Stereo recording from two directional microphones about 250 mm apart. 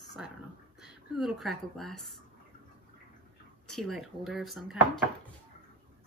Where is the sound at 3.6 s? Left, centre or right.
Centre.